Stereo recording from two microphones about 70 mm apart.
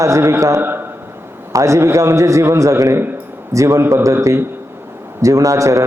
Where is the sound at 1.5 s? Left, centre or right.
Right.